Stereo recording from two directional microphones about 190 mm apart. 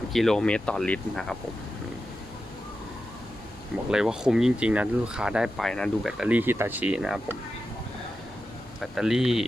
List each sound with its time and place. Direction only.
0.1 s speech: centre (ahead or behind)
3.9 s speech: 5° right (ahead or behind)
8.8 s speech: centre (ahead or behind)